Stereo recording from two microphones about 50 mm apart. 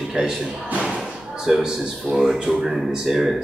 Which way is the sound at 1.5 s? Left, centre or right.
Centre.